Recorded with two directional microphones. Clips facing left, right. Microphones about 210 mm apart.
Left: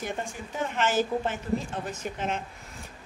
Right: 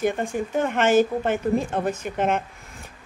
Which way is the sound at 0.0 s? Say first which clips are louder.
Right 10 dB; 55° right (ahead or behind).